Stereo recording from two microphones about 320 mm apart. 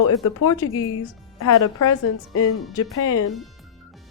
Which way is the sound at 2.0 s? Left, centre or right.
Left.